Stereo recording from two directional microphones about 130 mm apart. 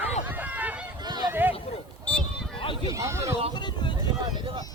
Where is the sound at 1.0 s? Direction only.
35° right (ahead or behind).